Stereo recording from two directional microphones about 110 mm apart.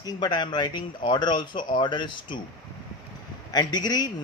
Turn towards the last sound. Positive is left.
turn(degrees=40)  # may be behind; listen again after turning